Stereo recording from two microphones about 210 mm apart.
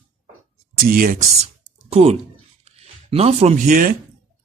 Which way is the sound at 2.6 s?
30° right (ahead or behind).